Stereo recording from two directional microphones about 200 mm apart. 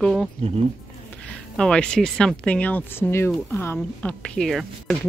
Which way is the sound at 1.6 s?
5° left (ahead or behind).